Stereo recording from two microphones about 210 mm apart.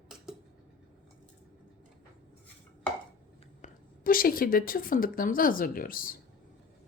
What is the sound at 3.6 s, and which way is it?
Speech, 40° left (ahead or behind).